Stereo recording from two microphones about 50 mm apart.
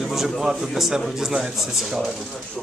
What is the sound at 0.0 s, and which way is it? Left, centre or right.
A man's voice, centre.